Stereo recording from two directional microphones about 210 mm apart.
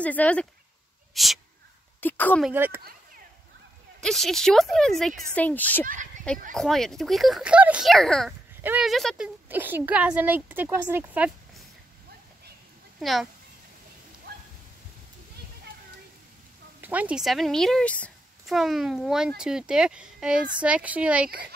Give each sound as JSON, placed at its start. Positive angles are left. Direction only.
{"t": 0.0, "sound": "a woman's voice", "side_deg": 5}
{"t": 2.4, "sound": "a woman's voice", "side_deg": -10}
{"t": 4.0, "sound": "a woman's voice", "side_deg": 0}
{"t": 5.9, "sound": "speech", "side_deg": -35}
{"t": 6.5, "sound": "a woman's voice", "side_deg": 0}
{"t": 13.0, "sound": "a woman's voice", "side_deg": 0}
{"t": 16.8, "sound": "a woman's voice", "side_deg": -5}